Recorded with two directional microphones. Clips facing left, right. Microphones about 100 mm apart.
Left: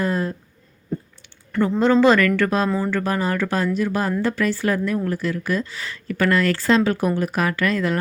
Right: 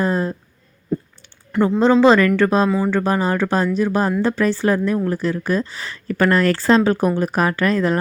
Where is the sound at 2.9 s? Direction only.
25° right (ahead or behind).